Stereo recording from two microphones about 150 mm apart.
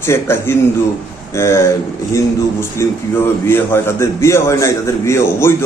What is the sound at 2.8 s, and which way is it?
A man's voice, 20° left (ahead or behind).